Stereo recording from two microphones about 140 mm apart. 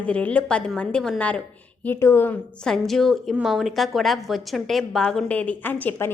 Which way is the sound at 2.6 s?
5° left (ahead or behind).